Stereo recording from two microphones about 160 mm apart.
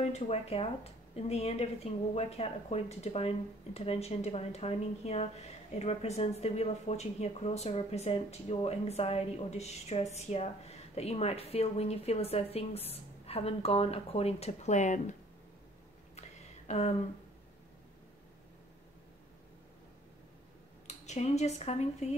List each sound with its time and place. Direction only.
0.0 s speech: 40° left (ahead or behind)
16.2 s a sound: 45° left (ahead or behind)
20.8 s speech: 45° left (ahead or behind)